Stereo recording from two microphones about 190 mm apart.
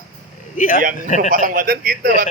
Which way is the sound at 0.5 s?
45° left (ahead or behind).